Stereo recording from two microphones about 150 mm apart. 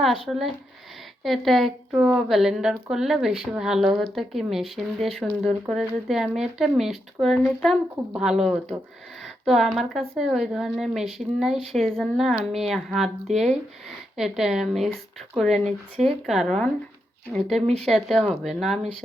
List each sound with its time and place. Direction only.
0.3 s speech: centre (ahead or behind)
9.2 s a sound: centre (ahead or behind)
10.2 s speech: centre (ahead or behind)
13.3 s speech: 50° right (ahead or behind)
14.2 s speech: 5° right (ahead or behind)